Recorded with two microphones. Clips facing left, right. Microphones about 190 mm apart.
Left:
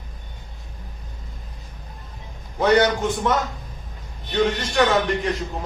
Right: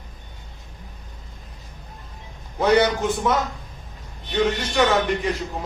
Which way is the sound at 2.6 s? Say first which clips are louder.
Even; 5° right (ahead or behind).